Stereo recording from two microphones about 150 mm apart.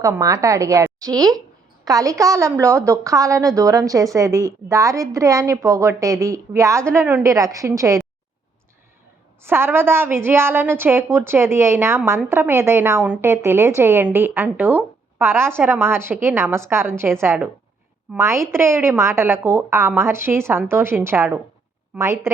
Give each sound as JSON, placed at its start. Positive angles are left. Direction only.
{"t": 0.0, "sound": "a woman's voice", "side_deg": -20}
{"t": 9.4, "sound": "a woman's voice", "side_deg": -15}